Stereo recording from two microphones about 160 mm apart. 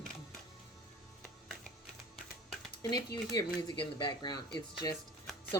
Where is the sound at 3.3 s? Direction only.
25° left (ahead or behind).